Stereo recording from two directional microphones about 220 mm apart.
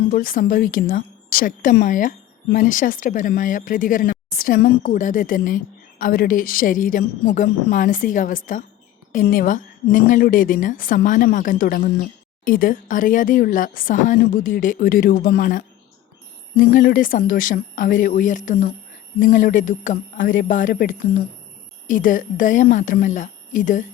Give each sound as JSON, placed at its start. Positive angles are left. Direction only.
{"t": 0.1, "sound": "a woman's voice", "side_deg": 40}